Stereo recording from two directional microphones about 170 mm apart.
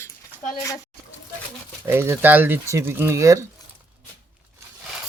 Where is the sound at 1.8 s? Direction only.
15° right (ahead or behind).